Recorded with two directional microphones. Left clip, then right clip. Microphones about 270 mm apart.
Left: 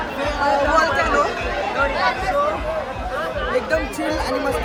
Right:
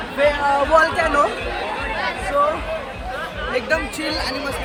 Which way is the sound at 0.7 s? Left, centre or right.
Right.